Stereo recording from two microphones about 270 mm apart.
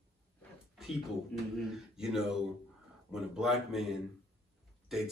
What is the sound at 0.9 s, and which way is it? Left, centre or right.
Speech, centre.